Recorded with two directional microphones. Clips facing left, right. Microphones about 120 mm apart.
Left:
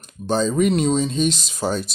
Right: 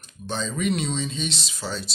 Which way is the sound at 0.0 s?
40° left (ahead or behind).